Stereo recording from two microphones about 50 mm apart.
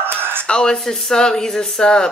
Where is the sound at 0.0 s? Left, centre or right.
Right.